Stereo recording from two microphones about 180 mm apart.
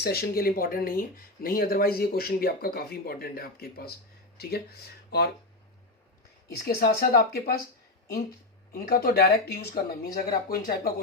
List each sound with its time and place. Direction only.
0.0 s speech: 60° left (ahead or behind)
6.7 s speech: 55° left (ahead or behind)
8.7 s speech: 55° left (ahead or behind)